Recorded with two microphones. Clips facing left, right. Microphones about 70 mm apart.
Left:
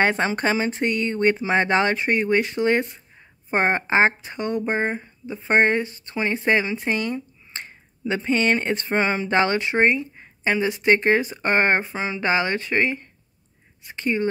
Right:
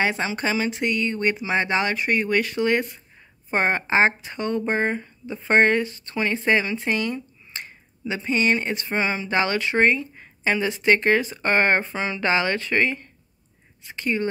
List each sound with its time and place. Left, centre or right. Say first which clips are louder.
0.0 s speech: left 3 dB; left